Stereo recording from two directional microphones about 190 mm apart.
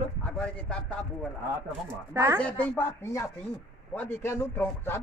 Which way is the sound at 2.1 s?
15° right (ahead or behind).